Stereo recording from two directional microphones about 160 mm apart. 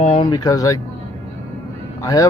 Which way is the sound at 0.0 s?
40° left (ahead or behind).